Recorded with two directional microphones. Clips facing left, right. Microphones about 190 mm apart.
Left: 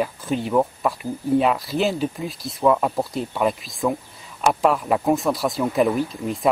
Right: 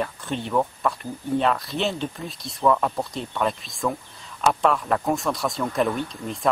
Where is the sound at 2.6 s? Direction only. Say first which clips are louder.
Left 2 dB; 15° left (ahead or behind).